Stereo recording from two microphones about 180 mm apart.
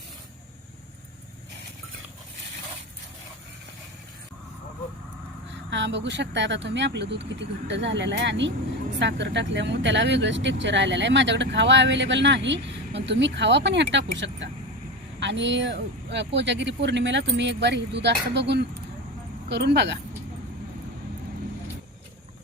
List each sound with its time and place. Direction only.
5.7 s speech: 80° right